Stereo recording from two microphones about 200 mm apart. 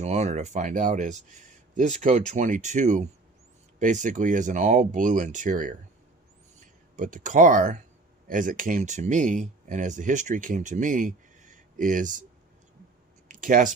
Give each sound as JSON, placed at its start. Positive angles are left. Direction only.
{"t": 0.0, "sound": "speech", "side_deg": -35}
{"t": 6.9, "sound": "speech", "side_deg": -40}
{"t": 13.2, "sound": "a sound", "side_deg": -40}